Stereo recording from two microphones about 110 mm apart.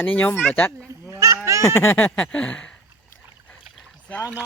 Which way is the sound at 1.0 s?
25° right (ahead or behind).